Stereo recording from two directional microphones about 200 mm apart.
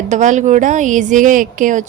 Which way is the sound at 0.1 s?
35° right (ahead or behind).